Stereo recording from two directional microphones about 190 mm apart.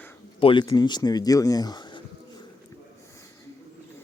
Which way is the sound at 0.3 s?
25° left (ahead or behind).